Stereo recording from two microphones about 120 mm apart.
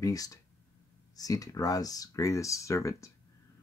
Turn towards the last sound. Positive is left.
turn(degrees=25)  # may be behind; listen again after turning